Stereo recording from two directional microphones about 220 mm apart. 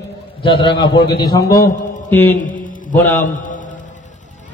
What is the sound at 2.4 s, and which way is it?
Mantra, 35° left (ahead or behind).